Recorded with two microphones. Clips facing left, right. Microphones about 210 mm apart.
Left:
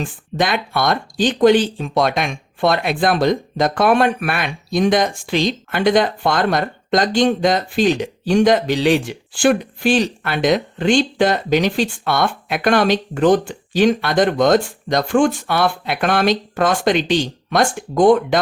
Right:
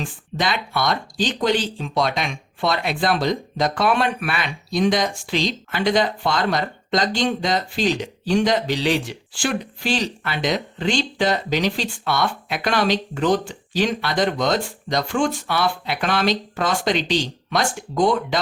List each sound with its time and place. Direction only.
0.0 s speech: 50° left (ahead or behind)